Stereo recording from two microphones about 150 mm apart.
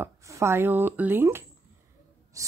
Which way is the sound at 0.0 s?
20° right (ahead or behind).